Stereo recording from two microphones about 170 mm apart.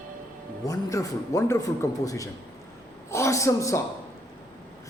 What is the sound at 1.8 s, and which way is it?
Speech, 20° left (ahead or behind).